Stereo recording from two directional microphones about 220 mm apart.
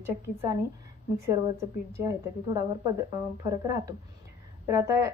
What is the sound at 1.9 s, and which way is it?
A woman's voice, 15° right (ahead or behind).